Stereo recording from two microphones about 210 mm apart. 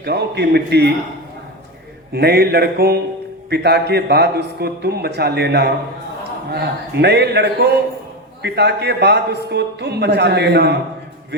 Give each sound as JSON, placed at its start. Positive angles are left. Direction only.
{"t": 0.0, "sound": "a man's voice", "side_deg": -50}
{"t": 2.1, "sound": "a man's voice", "side_deg": -50}